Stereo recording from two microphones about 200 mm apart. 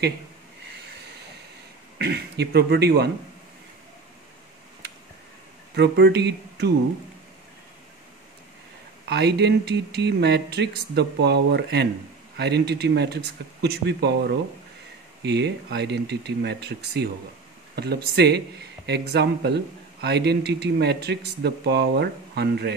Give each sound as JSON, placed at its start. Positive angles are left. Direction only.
{"t": 2.0, "sound": "speech", "side_deg": -55}
{"t": 5.8, "sound": "speech", "side_deg": -55}
{"t": 9.1, "sound": "speech", "side_deg": -55}